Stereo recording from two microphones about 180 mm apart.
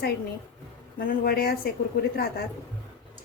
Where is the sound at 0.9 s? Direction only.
55° left (ahead or behind).